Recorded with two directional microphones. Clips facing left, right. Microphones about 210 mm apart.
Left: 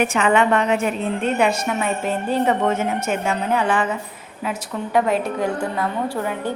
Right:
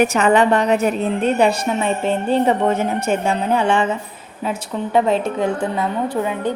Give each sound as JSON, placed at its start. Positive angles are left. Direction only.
{"t": 0.0, "sound": "a woman's voice", "side_deg": -40}
{"t": 4.9, "sound": "a woman's voice", "side_deg": -25}